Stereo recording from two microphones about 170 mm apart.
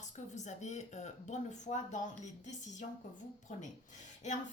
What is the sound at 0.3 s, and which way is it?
Speech, 45° left (ahead or behind).